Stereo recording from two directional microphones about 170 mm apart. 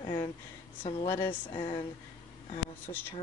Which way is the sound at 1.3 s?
30° left (ahead or behind).